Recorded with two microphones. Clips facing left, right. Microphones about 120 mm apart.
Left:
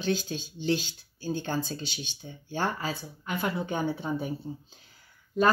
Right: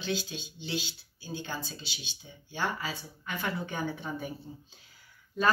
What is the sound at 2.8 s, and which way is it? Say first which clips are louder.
Speech: left 4 dB; 25° left (ahead or behind).